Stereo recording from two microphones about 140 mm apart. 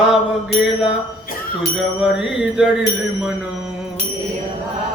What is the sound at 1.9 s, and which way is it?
Mantra, 5° right (ahead or behind).